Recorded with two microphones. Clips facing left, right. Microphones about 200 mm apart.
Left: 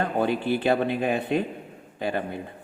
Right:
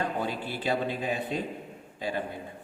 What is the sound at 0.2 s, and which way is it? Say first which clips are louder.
A man's voice: left 9 dB; 60° left (ahead or behind).